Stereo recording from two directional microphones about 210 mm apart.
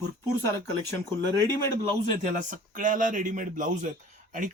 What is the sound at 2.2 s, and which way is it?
Speech, 40° right (ahead or behind).